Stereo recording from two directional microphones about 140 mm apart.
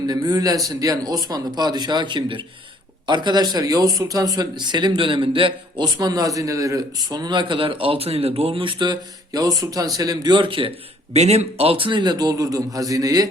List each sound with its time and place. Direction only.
0.1 s a man's voice: 30° right (ahead or behind)
11.1 s a man's voice: 50° right (ahead or behind); by 13.2 s 25° right (ahead or behind)